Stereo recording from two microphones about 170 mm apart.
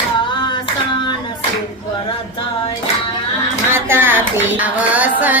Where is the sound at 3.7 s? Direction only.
15° right (ahead or behind).